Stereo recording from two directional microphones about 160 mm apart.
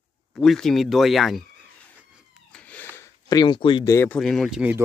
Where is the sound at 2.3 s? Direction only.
5° left (ahead or behind).